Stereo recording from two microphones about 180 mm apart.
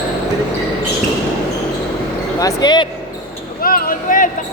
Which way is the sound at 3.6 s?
50° left (ahead or behind).